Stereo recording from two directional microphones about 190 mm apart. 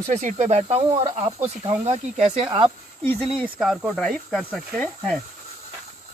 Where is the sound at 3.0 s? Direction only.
5° left (ahead or behind).